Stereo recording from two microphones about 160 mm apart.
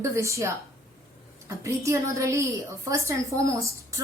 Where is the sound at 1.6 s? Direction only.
20° right (ahead or behind).